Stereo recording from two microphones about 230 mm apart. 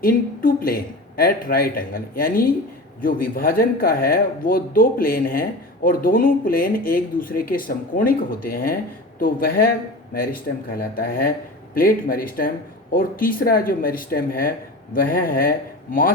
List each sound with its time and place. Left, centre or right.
0.0 s speech: left
10.7 s speech: left